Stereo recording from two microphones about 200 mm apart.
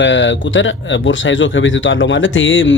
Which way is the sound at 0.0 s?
65° left (ahead or behind).